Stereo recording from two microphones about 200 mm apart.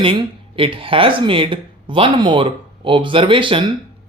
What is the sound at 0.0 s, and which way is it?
Speech, 25° right (ahead or behind).